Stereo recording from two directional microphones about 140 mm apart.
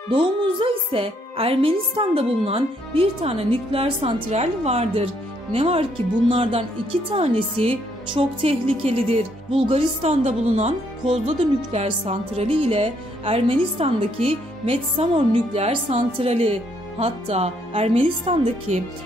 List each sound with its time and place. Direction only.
0.1 s music: 35° right (ahead or behind)
7.2 s speech: 40° right (ahead or behind)
10.0 s speech: 55° right (ahead or behind)